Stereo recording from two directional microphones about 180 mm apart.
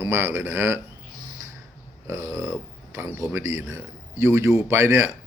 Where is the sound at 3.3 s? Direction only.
15° right (ahead or behind).